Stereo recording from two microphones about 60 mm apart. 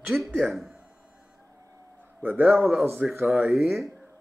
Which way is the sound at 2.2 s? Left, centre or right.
Right.